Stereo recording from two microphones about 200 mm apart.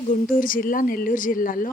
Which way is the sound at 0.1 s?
45° left (ahead or behind).